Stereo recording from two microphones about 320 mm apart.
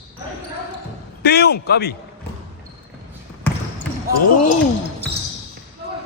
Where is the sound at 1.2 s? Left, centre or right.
Left.